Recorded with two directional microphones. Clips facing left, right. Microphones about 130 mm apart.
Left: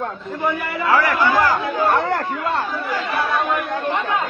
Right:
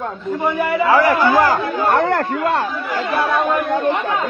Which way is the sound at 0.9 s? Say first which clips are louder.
Right 2 dB; 25° right (ahead or behind).